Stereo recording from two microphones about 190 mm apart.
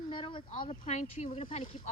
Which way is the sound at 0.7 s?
40° left (ahead or behind).